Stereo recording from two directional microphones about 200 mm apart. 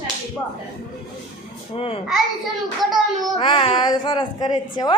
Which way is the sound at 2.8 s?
Centre (ahead or behind).